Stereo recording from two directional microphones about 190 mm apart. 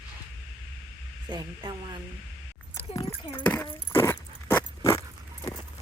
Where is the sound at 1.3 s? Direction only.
20° right (ahead or behind).